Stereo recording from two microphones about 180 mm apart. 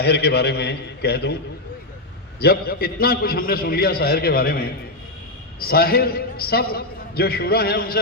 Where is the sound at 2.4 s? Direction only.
60° left (ahead or behind).